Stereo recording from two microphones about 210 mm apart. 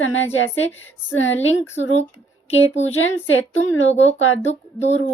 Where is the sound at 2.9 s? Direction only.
70° left (ahead or behind).